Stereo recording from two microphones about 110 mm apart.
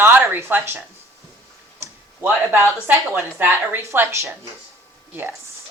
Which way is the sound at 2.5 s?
20° right (ahead or behind).